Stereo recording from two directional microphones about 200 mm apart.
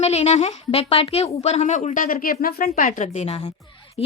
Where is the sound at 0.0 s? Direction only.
35° left (ahead or behind).